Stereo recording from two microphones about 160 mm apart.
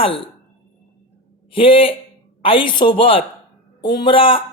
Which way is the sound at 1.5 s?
35° left (ahead or behind).